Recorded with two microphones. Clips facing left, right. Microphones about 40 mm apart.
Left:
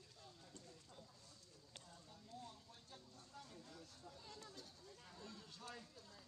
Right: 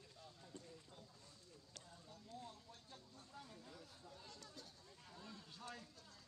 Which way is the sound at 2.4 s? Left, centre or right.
Centre.